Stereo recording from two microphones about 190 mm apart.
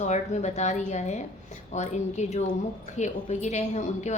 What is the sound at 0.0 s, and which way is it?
A woman's voice, 40° left (ahead or behind).